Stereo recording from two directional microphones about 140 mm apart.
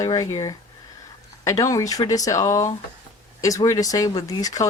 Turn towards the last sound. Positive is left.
turn(degrees=25)  # may be behind; listen again after turning